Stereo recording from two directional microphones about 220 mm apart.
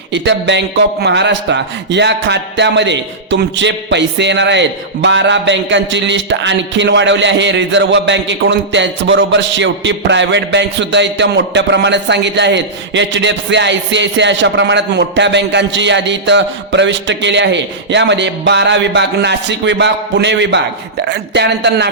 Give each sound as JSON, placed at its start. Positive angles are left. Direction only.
{"t": 0.1, "sound": "speech", "side_deg": -55}